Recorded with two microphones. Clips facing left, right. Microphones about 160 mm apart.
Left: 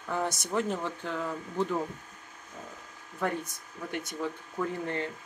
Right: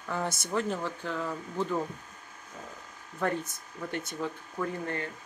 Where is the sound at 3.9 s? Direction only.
15° left (ahead or behind).